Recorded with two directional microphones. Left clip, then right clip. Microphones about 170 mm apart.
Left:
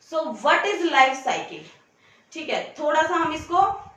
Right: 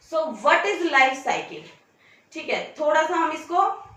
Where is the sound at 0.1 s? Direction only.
20° left (ahead or behind).